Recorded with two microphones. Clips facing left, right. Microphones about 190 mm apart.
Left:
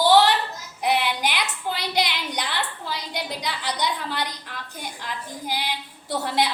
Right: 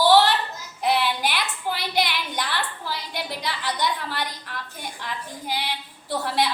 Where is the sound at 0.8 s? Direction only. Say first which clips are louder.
Even; 15° left (ahead or behind).